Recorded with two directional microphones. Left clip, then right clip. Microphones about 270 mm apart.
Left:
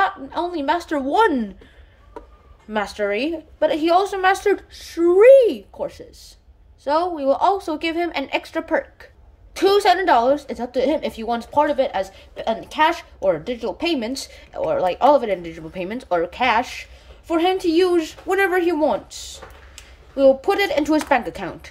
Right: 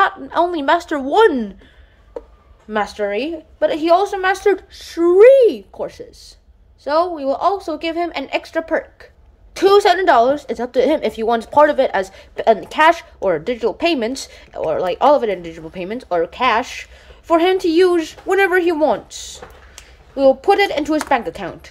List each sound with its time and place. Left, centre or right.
0.0 s a woman's voice: centre
2.7 s a woman's voice: centre